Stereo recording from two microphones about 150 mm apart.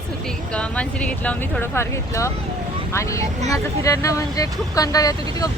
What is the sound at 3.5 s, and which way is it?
Speech, 20° left (ahead or behind).